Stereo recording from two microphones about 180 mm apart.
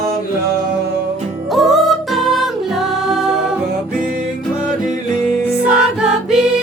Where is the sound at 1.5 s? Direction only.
Centre (ahead or behind).